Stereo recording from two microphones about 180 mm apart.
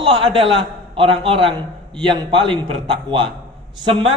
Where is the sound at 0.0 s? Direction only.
30° right (ahead or behind).